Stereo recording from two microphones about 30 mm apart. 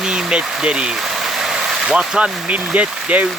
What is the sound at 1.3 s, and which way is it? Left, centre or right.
Vehicle, centre.